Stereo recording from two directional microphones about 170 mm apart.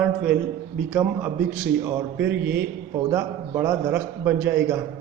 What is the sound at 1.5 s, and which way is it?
A man's voice, 10° right (ahead or behind).